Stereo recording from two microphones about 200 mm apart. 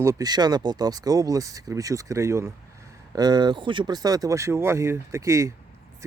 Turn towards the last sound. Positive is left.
turn(degrees=-15)  # may be behind; listen again after turning